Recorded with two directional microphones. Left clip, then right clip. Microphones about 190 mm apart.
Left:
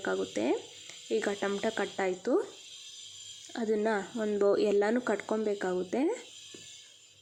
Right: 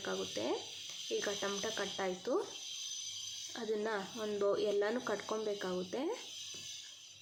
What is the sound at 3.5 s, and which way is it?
Stir, 30° left (ahead or behind).